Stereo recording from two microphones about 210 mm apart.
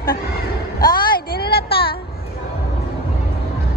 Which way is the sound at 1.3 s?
50° left (ahead or behind).